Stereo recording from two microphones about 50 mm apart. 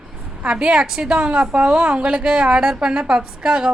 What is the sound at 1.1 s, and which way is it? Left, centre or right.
A woman's voice, right.